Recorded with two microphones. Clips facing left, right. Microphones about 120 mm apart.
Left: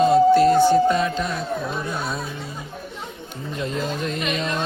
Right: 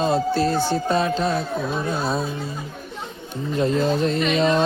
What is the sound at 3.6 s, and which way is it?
Speech, 35° right (ahead or behind).